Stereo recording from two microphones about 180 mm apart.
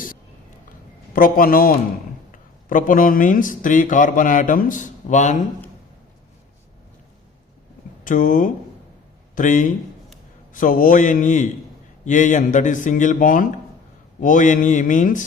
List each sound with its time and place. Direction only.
1.1 s a man's voice: 55° left (ahead or behind)
8.0 s a man's voice: 45° left (ahead or behind)